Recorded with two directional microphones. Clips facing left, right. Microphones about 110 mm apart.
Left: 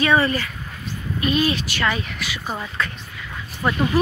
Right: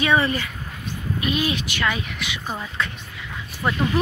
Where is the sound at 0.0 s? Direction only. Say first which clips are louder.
Left 2 dB; 15° right (ahead or behind).